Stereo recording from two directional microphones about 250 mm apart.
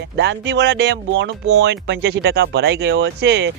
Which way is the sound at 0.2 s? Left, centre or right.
Right.